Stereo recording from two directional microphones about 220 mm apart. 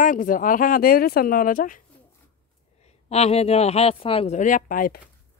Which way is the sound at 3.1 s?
30° left (ahead or behind).